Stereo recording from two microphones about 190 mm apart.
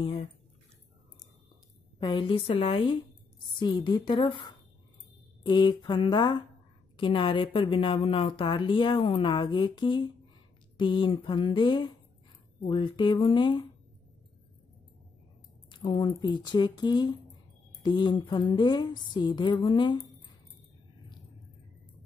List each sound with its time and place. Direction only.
0.0 s speech: 25° left (ahead or behind)
2.0 s speech: 25° left (ahead or behind)
15.7 s speech: 25° left (ahead or behind)